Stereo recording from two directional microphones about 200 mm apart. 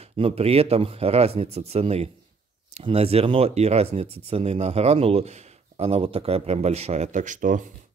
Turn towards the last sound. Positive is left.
turn(degrees=-40)  # may be behind; listen again after turning